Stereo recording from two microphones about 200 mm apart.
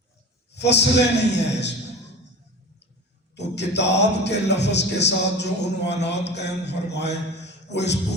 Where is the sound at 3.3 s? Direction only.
60° left (ahead or behind).